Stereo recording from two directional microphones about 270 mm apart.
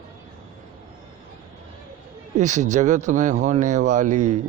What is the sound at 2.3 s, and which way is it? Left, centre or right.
Speech, right.